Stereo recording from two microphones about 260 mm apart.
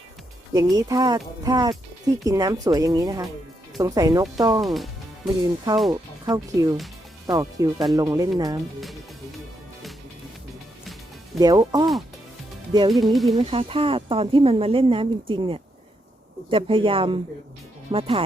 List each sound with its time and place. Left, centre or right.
0.5 s speech: centre
4.6 s music: centre
5.9 s speech: centre
11.3 s speech: centre